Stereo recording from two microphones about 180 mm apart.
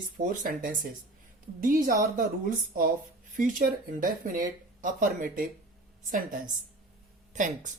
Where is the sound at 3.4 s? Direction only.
50° right (ahead or behind).